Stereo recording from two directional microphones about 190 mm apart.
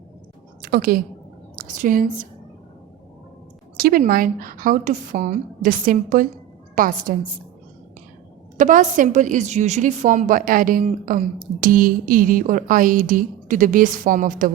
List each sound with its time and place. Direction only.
0.6 s a woman's voice: 50° right (ahead or behind)
3.8 s a woman's voice: 50° right (ahead or behind)
8.5 s a woman's voice: 45° right (ahead or behind)